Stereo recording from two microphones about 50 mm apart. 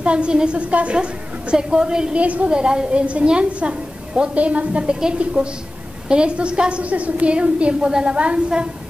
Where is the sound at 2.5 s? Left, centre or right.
Centre.